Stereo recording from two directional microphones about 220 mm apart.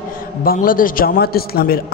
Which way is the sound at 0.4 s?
40° left (ahead or behind).